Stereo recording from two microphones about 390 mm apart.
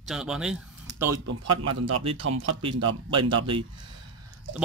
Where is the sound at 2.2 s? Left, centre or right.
Right.